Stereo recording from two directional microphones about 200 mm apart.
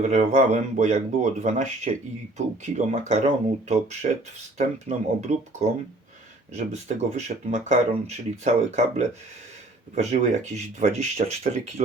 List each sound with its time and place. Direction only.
0.0 s speech: 35° right (ahead or behind)
3.1 s speech: 35° right (ahead or behind)